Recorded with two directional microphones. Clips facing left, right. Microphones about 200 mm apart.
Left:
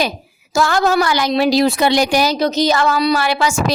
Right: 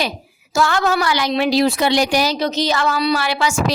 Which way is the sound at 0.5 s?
40° left (ahead or behind).